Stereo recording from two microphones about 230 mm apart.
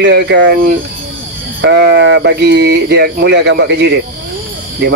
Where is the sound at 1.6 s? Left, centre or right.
Right.